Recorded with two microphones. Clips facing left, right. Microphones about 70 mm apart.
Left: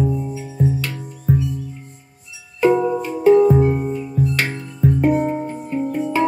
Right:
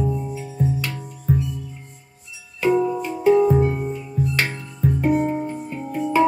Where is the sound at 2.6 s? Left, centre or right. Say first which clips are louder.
Left 3 dB; left.